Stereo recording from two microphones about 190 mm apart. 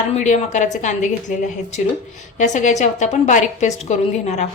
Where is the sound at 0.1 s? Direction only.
35° left (ahead or behind).